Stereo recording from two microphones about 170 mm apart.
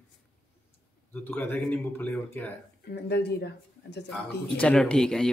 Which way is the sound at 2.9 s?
75° left (ahead or behind).